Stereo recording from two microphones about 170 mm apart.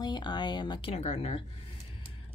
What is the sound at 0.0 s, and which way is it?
Speech, 25° left (ahead or behind).